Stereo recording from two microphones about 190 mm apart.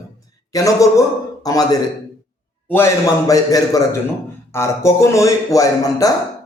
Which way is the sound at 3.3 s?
20° left (ahead or behind).